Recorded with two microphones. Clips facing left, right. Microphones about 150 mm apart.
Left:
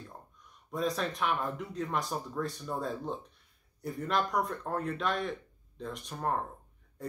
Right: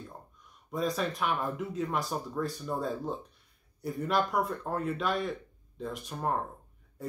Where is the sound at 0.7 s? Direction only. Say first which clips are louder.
Right 1 dB; centre (ahead or behind).